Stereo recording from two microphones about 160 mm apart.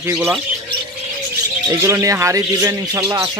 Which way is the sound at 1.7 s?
20° right (ahead or behind).